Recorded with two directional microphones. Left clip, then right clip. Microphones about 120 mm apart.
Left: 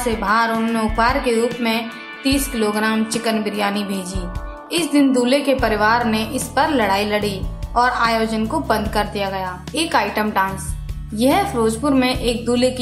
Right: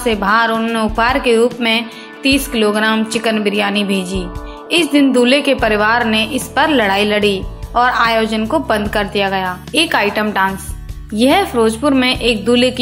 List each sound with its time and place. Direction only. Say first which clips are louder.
0.0 s a woman's voice: right 4 dB; 30° right (ahead or behind)